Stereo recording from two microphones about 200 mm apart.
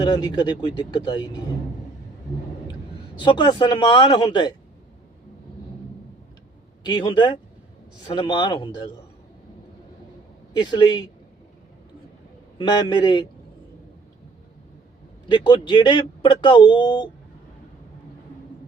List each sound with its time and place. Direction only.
0.0 s a man's voice: 20° left (ahead or behind)
3.2 s a man's voice: 25° left (ahead or behind)
6.8 s a man's voice: 20° left (ahead or behind)
10.5 s a man's voice: 20° left (ahead or behind)
12.5 s a man's voice: 25° left (ahead or behind)
15.3 s a man's voice: 25° left (ahead or behind)